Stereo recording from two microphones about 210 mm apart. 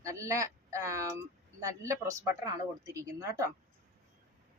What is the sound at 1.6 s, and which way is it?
Speech, 15° right (ahead or behind).